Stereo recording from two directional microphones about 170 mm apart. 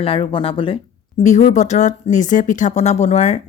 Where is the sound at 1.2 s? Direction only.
45° left (ahead or behind).